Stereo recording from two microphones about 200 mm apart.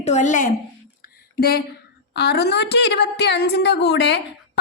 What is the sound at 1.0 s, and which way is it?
Music, 50° left (ahead or behind).